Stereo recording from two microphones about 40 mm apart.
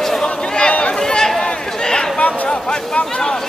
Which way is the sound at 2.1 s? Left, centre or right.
Left.